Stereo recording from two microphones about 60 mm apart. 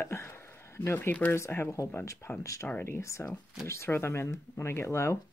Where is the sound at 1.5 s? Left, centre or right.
Left.